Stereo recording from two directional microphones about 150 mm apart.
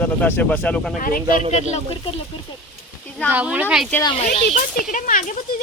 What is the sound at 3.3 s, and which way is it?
Speech, 10° right (ahead or behind).